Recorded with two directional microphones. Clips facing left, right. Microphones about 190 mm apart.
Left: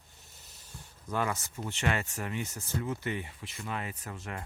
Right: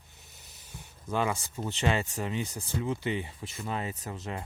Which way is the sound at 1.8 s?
20° right (ahead or behind).